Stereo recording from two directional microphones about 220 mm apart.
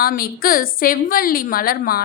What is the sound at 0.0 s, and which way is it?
A woman's voice, 45° left (ahead or behind).